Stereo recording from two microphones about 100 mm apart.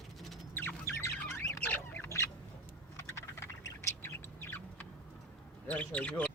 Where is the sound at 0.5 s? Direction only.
25° left (ahead or behind).